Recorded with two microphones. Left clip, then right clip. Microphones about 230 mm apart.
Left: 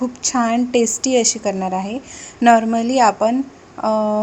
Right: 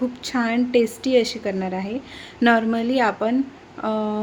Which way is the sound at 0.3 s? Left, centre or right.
Centre.